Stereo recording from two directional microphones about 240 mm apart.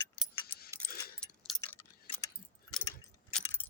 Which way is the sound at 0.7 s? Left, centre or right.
Centre.